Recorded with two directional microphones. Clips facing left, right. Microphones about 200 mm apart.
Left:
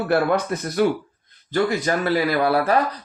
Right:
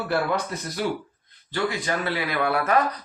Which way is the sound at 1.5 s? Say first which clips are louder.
Left 5 dB; 40° left (ahead or behind).